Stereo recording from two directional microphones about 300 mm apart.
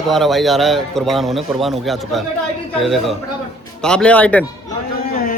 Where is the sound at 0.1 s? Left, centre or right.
Centre.